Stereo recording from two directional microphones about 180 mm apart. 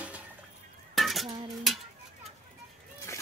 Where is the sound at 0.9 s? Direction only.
Centre (ahead or behind).